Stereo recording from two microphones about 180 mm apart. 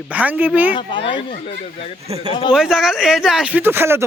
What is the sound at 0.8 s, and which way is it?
Speech, 30° left (ahead or behind).